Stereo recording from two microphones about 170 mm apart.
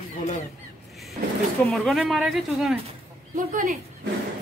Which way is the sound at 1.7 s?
Centre (ahead or behind).